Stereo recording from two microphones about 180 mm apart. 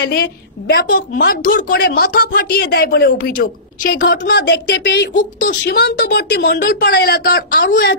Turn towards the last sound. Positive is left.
turn(degrees=55)  # may be behind; listen again after turning